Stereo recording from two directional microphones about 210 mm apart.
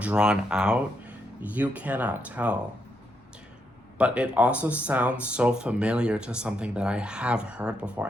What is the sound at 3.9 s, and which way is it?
Speech, 5° right (ahead or behind).